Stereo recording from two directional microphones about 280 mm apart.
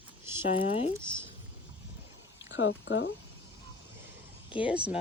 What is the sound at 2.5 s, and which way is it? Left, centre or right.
Speech, left.